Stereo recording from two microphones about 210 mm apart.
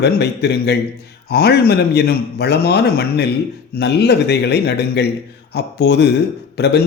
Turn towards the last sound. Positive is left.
turn(degrees=50)  # may be behind; listen again after turning